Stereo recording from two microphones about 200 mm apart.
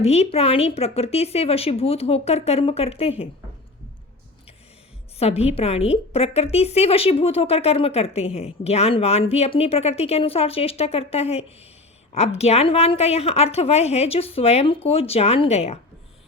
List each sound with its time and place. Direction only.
0.0 s a woman's voice: 30° left (ahead or behind)
5.2 s a woman's voice: 30° left (ahead or behind)